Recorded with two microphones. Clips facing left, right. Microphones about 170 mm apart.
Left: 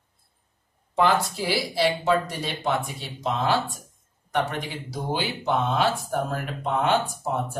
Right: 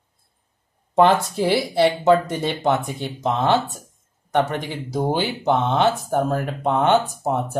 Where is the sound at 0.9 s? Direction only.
50° right (ahead or behind).